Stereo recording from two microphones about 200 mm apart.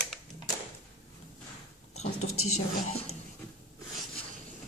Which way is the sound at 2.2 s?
90° left.